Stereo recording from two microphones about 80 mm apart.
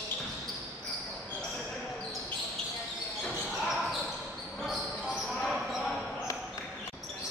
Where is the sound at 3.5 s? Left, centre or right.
Centre.